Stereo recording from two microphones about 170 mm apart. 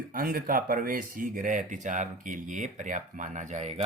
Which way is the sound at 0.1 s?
60° right (ahead or behind).